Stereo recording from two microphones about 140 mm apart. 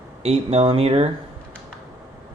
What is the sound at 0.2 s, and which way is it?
Speech, 45° right (ahead or behind).